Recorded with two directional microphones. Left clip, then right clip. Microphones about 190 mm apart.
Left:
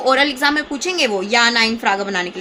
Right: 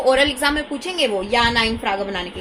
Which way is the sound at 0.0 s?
30° left (ahead or behind).